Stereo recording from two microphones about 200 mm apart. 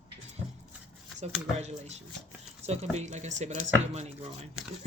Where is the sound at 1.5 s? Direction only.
35° right (ahead or behind).